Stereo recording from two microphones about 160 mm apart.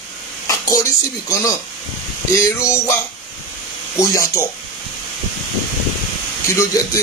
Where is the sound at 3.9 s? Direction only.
20° left (ahead or behind).